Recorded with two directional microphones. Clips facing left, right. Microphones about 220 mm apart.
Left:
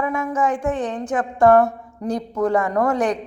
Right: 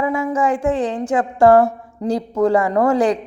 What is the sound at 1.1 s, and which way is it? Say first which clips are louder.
A woman's voice: right 2 dB; 30° right (ahead or behind).